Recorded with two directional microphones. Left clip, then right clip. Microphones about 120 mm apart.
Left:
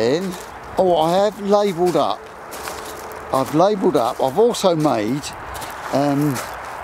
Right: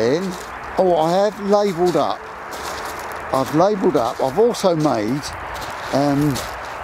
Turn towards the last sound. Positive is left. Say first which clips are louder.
# right 1 dB
turn(degrees=0)  # may be behind; listen again after turning